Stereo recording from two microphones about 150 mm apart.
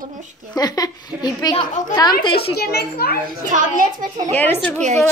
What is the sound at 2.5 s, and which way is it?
Speech, 90° left.